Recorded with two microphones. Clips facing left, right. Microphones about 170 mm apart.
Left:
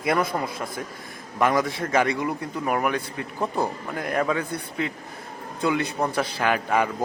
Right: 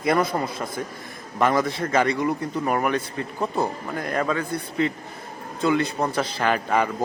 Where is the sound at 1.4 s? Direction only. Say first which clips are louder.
Right 1 dB; 10° left (ahead or behind).